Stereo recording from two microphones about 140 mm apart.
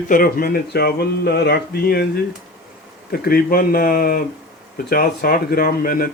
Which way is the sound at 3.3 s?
90° left.